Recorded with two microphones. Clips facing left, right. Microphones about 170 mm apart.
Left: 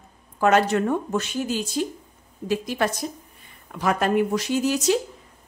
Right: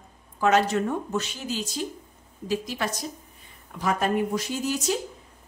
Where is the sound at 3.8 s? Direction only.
75° left (ahead or behind).